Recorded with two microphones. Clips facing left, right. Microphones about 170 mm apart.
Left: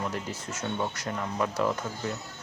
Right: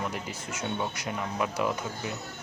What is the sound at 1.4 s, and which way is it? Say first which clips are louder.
Speech: left 2 dB; 15° right (ahead or behind).